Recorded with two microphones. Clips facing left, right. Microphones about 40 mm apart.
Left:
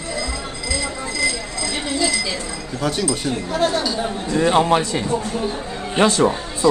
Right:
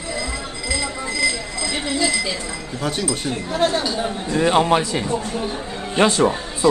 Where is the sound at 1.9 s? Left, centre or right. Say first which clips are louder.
Even; right.